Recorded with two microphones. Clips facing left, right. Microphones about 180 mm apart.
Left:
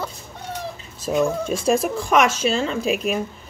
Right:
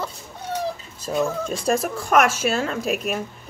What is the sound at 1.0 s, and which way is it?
Speech, 5° left (ahead or behind).